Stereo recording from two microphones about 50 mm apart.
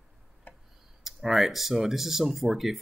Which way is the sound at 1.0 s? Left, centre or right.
Centre.